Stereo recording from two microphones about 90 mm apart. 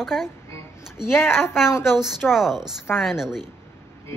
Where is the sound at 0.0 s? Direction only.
5° right (ahead or behind).